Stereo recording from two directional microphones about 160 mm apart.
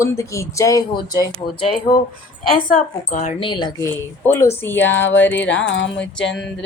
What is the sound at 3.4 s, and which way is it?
Speech, 30° left (ahead or behind).